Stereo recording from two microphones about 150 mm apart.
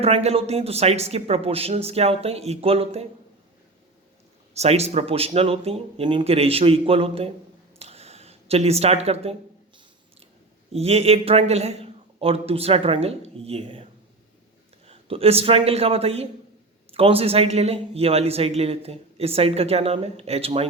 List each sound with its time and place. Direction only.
0.0 s speech: 45° right (ahead or behind)
4.5 s a man's voice: 45° right (ahead or behind)
7.8 s a sound: 45° right (ahead or behind)
10.7 s a man's voice: 45° right (ahead or behind)
14.8 s a man's voice: 40° right (ahead or behind)